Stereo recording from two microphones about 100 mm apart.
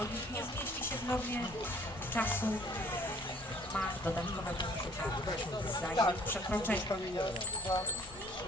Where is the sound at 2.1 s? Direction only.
20° left (ahead or behind).